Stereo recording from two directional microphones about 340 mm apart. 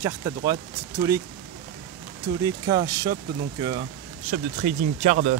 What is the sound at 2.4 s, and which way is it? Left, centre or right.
Speech, centre.